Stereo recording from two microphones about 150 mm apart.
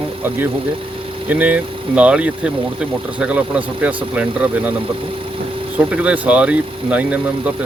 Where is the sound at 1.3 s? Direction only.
10° right (ahead or behind).